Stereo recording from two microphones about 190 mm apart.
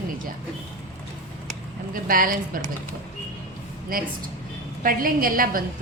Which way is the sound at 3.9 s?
50° right (ahead or behind).